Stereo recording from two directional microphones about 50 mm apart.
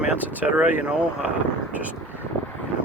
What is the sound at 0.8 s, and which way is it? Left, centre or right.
Speech, right.